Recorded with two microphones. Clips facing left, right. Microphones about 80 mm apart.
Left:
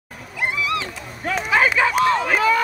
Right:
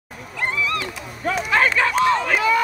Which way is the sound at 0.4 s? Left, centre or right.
Centre.